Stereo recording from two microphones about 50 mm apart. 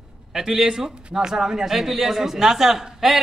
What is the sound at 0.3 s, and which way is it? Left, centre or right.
A man's voice, centre.